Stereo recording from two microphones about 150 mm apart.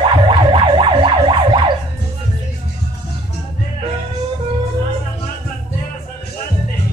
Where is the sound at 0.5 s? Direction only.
35° right (ahead or behind).